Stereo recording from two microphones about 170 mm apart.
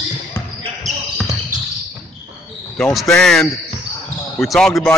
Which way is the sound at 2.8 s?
Centre (ahead or behind).